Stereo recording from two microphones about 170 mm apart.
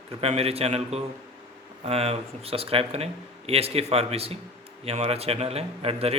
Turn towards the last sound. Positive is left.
turn(degrees=-35)  # may be behind; listen again after turning